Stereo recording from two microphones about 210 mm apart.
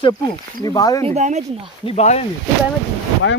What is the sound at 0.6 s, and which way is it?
Speech, 15° left (ahead or behind).